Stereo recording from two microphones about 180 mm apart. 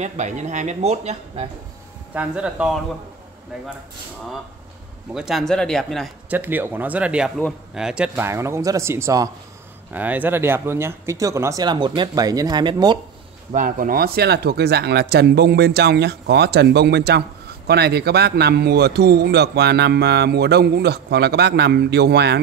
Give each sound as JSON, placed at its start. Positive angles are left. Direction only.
{"t": 0.0, "sound": "speech", "side_deg": -40}
{"t": 2.1, "sound": "speech", "side_deg": -5}
{"t": 5.1, "sound": "speech", "side_deg": 0}
{"t": 6.3, "sound": "speech", "side_deg": -10}
{"t": 13.5, "sound": "a man's voice", "side_deg": -50}